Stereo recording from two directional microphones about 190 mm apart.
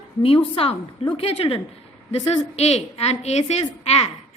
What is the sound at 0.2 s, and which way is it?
A woman's voice, 30° left (ahead or behind).